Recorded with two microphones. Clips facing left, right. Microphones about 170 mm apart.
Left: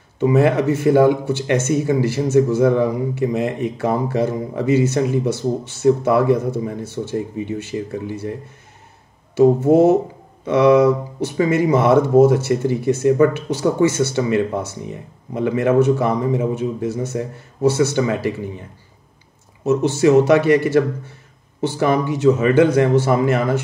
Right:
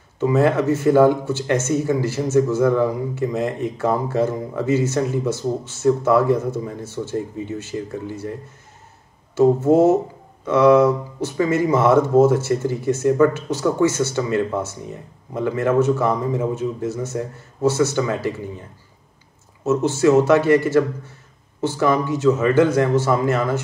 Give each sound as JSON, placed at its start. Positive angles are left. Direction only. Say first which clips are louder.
{"t": 0.2, "sound": "speech", "louder": "left 2 dB", "side_deg": 15}
{"t": 19.6, "sound": "speech", "louder": "left 1 dB", "side_deg": 15}